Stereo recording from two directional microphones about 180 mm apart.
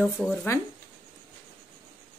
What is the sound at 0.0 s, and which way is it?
Speech, centre (ahead or behind).